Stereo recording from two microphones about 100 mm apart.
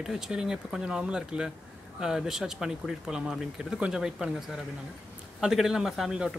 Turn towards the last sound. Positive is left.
turn(degrees=-5)  # may be behind; listen again after turning